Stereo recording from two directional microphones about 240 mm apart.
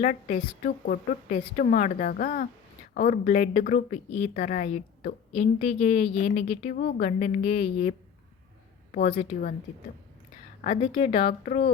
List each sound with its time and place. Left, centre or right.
0.0 s a woman's voice: left
9.0 s a woman's voice: left
10.6 s speech: left
11.3 s a woman's voice: left